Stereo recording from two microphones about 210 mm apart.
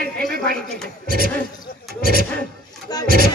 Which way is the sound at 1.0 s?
45° right (ahead or behind).